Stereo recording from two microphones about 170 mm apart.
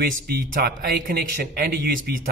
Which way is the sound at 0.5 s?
60° right (ahead or behind).